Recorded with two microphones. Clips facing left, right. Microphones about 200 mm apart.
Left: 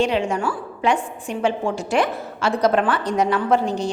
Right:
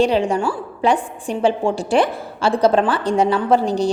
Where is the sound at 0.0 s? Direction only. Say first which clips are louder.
Right 4 dB; 35° right (ahead or behind).